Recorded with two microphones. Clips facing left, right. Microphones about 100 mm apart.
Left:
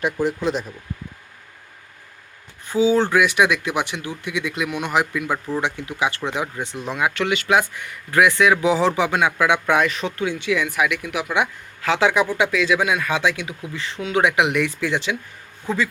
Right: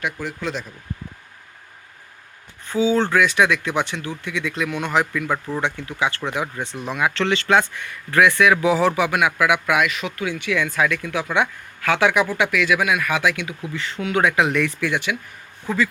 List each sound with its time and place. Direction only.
0.0 s speech: 30° left (ahead or behind)
0.3 s speech: 15° left (ahead or behind)
2.9 s a man's voice: 15° left (ahead or behind)